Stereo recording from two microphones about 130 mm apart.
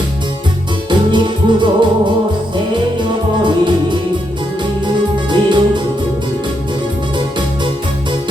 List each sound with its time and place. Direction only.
0.9 s music: 35° right (ahead or behind)
3.4 s music: 35° right (ahead or behind)
5.3 s music: 35° right (ahead or behind)